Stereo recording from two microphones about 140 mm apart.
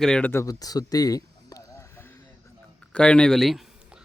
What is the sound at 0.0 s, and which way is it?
Speech, 5° left (ahead or behind).